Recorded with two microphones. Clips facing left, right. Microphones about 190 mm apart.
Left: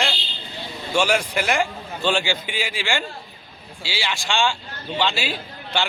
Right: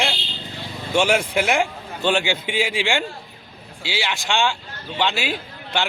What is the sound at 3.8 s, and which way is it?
A man's voice, 20° right (ahead or behind).